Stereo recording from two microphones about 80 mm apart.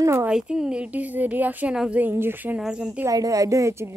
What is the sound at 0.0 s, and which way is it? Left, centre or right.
Speech, right.